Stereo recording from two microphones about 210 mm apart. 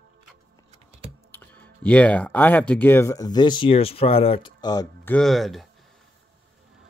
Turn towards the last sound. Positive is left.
turn(degrees=0)  # may be behind; listen again after turning